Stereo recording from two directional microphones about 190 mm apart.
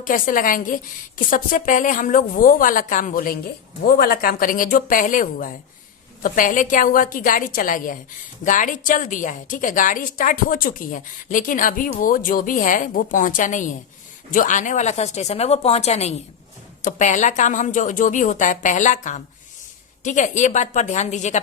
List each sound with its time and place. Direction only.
0.0 s a woman's voice: 45° left (ahead or behind)